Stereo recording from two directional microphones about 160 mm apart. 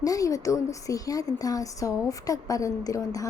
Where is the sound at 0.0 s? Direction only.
20° left (ahead or behind).